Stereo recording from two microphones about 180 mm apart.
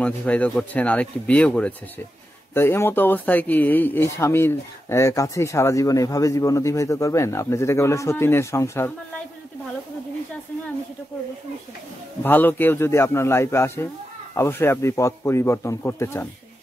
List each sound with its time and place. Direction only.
0.0 s speech: 5° left (ahead or behind)
12.2 s speech: 10° left (ahead or behind)